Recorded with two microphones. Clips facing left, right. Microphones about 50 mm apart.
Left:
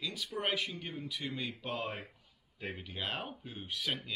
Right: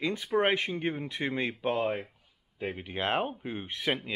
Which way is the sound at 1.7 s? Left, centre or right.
Centre.